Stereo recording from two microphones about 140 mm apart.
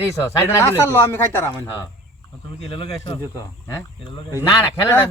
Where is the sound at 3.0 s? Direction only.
25° left (ahead or behind).